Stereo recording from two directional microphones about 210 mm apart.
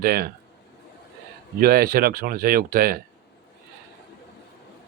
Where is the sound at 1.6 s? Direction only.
45° right (ahead or behind).